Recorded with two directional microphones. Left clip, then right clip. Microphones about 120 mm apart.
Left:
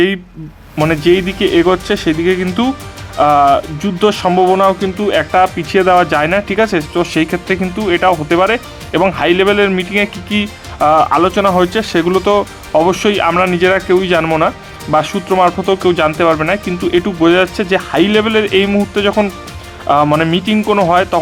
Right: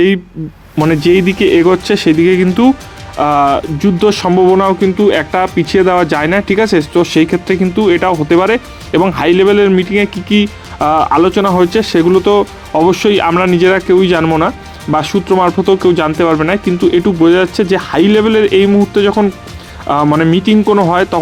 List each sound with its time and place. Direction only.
0.8 s speech: 20° right (ahead or behind)
3.2 s speech: 15° right (ahead or behind)
19.9 s speech: 15° right (ahead or behind)